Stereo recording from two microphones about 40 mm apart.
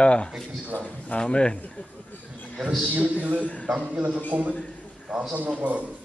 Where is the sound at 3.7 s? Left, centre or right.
Right.